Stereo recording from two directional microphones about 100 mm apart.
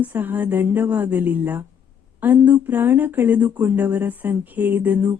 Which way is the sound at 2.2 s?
15° right (ahead or behind).